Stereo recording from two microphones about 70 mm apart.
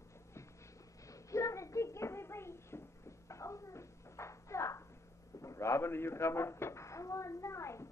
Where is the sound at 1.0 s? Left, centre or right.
Left.